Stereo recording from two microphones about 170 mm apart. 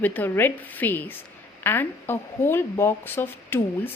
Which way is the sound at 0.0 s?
10° left (ahead or behind).